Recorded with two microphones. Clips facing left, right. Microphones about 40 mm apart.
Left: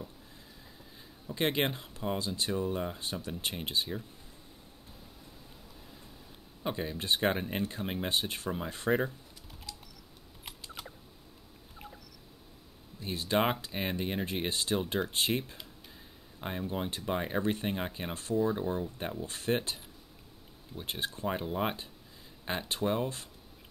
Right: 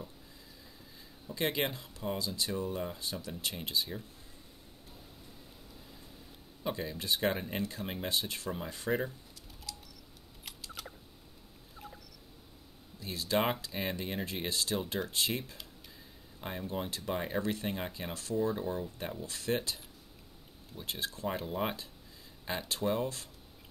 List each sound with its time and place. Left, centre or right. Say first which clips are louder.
1.3 s speech: left 3 dB; left
3.0 s speech: left 2 dB; left
6.6 s speech: left 2 dB; left
7.8 s speech: left 3 dB; centre
8.1 s speech: left 1 dB; left
9.7 s a sound: right 1 dB; centre
10.4 s typing: left 1 dB; centre
13.0 s speech: left 2 dB; left
17.4 s speech: left 3 dB; left
21.5 s speech: left 2 dB; centre
22.4 s speech: left 2 dB; left